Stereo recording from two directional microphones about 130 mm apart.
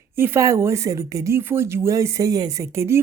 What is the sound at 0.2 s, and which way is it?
Speech, 20° right (ahead or behind).